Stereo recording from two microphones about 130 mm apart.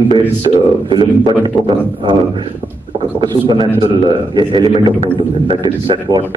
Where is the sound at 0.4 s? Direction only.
35° right (ahead or behind).